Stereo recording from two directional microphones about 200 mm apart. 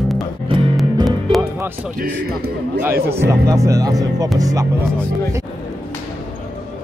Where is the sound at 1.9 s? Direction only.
50° right (ahead or behind).